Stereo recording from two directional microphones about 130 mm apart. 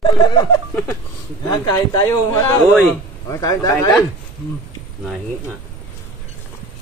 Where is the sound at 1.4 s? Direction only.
25° left (ahead or behind).